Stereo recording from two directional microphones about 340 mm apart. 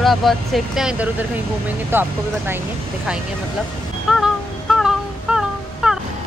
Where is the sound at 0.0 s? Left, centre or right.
Centre.